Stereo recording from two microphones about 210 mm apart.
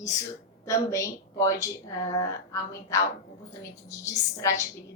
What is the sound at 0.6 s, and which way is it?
A woman's voice, 15° left (ahead or behind).